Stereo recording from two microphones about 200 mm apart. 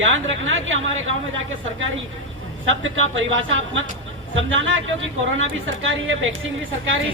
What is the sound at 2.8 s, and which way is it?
A man's voice, 70° right (ahead or behind).